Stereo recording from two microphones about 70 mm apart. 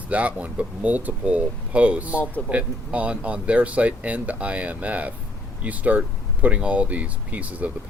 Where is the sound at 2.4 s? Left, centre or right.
Centre.